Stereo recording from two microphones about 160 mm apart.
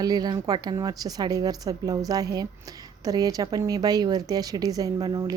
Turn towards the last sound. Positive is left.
turn(degrees=-25)  # may be behind; listen again after turning